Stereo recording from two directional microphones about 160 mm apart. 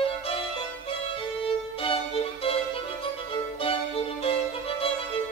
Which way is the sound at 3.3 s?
35° left (ahead or behind).